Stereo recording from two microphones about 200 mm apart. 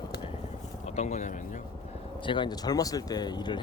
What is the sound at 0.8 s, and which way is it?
Speech, 35° left (ahead or behind).